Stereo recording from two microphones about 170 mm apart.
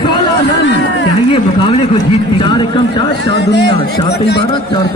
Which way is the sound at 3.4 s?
90° left.